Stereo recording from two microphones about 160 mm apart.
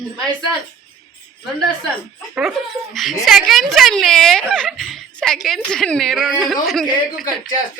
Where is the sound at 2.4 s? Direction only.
Centre (ahead or behind).